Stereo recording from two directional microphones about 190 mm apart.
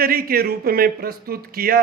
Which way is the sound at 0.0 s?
50° right (ahead or behind).